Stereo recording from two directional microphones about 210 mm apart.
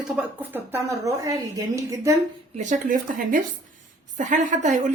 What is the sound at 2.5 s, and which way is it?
Speech, 35° right (ahead or behind).